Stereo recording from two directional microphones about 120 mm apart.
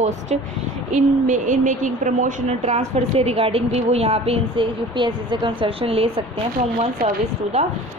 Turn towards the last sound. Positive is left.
turn(degrees=-60)  # may be behind; listen again after turning